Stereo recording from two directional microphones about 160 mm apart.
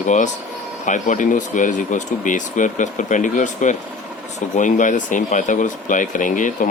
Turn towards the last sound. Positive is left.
turn(degrees=55)  # may be behind; listen again after turning